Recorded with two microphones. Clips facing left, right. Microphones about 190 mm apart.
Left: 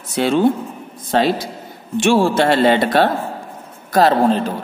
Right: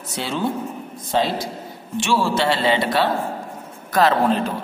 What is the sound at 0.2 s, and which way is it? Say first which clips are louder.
Speech: left 9 dB; 60° left (ahead or behind).